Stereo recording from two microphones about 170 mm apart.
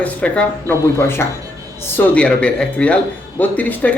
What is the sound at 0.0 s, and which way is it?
Speech, 5° left (ahead or behind).